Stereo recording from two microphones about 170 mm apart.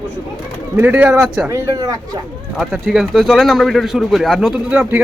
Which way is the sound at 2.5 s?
Centre (ahead or behind).